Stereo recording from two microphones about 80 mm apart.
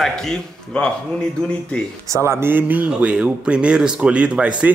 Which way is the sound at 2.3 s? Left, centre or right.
Right.